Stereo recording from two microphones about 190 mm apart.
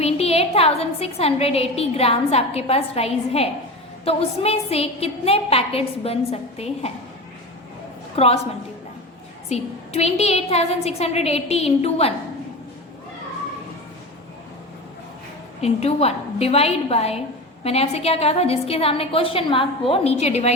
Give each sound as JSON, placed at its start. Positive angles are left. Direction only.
{"t": 0.0, "sound": "a woman's voice", "side_deg": 30}
{"t": 8.1, "sound": "a woman's voice", "side_deg": 30}
{"t": 9.5, "sound": "a woman's voice", "side_deg": 35}
{"t": 15.6, "sound": "a woman's voice", "side_deg": 35}